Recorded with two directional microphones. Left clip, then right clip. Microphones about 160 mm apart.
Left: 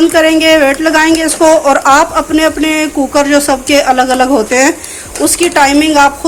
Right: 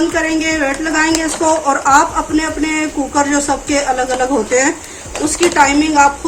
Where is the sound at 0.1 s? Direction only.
60° left (ahead or behind).